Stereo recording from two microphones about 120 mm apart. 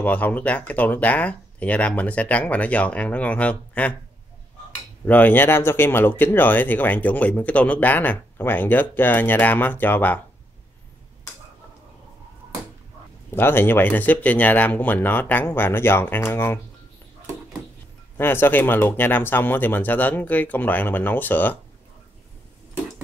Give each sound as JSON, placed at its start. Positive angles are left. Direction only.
{"t": 0.0, "sound": "speech", "side_deg": 15}
{"t": 5.0, "sound": "speech", "side_deg": 15}
{"t": 13.3, "sound": "speech", "side_deg": 20}
{"t": 18.1, "sound": "speech", "side_deg": 20}